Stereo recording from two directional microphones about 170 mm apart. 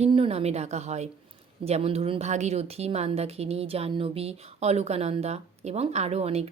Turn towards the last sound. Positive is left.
turn(degrees=-40)  # may be behind; listen again after turning